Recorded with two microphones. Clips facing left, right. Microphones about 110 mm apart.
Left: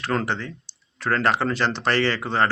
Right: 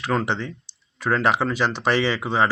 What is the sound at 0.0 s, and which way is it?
Speech, 5° right (ahead or behind).